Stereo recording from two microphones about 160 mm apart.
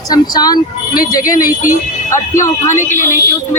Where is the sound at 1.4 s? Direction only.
60° left (ahead or behind).